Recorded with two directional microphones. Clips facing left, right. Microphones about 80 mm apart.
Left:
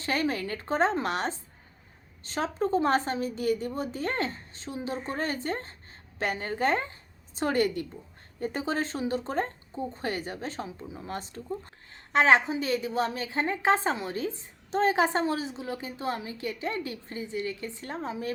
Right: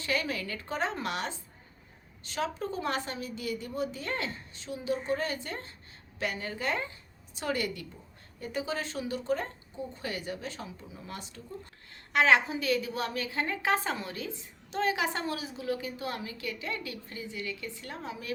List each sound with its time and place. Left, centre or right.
0.0 s a woman's voice: left